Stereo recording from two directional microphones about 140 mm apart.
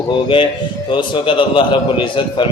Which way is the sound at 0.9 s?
35° left (ahead or behind).